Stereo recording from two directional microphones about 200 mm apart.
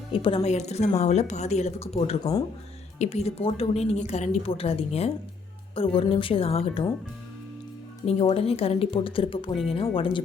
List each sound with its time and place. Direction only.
0.1 s a woman's voice: 25° left (ahead or behind)
8.0 s speech: 30° left (ahead or behind)